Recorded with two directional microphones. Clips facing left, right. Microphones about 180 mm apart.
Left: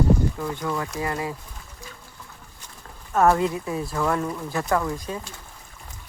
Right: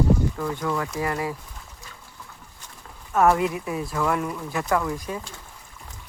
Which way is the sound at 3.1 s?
35° left (ahead or behind).